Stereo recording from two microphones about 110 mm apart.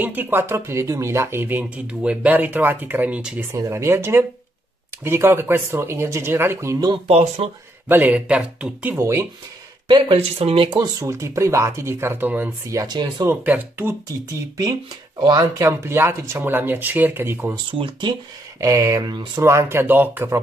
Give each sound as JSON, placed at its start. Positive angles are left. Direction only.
{"t": 0.0, "sound": "speech", "side_deg": -15}
{"t": 3.5, "sound": "speech", "side_deg": -25}
{"t": 7.1, "sound": "speech", "side_deg": -70}
{"t": 7.9, "sound": "speech", "side_deg": -10}
{"t": 8.9, "sound": "speech", "side_deg": -25}
{"t": 9.8, "sound": "speech", "side_deg": -50}
{"t": 10.1, "sound": "speech", "side_deg": -60}
{"t": 10.8, "sound": "speech", "side_deg": -30}
{"t": 12.6, "sound": "speech", "side_deg": -35}
{"t": 13.3, "sound": "speech", "side_deg": -20}
{"t": 15.1, "sound": "speech", "side_deg": -40}
{"t": 17.6, "sound": "speech", "side_deg": -50}
{"t": 18.6, "sound": "speech", "side_deg": -30}
{"t": 19.4, "sound": "speech", "side_deg": -25}